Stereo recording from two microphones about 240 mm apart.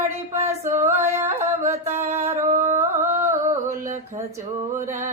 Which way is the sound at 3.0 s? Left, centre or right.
Centre.